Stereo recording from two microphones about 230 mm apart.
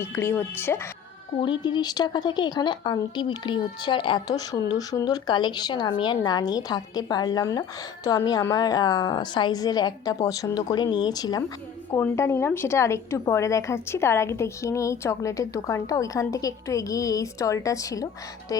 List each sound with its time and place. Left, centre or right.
0.0 s a woman's voice: centre